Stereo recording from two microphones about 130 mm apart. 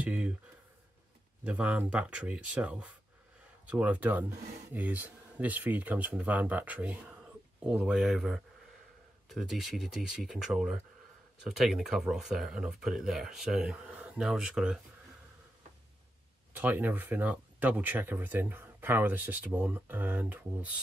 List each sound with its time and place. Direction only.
0.0 s speech: 10° right (ahead or behind)
1.4 s speech: 10° right (ahead or behind)
16.5 s speech: 15° right (ahead or behind)